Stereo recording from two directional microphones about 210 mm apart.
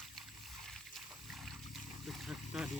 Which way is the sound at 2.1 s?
Centre (ahead or behind).